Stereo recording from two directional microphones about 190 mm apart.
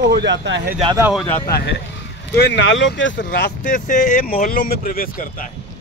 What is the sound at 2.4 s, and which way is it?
Speech, 65° left (ahead or behind).